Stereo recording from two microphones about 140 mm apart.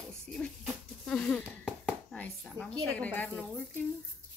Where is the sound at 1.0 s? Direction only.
5° left (ahead or behind).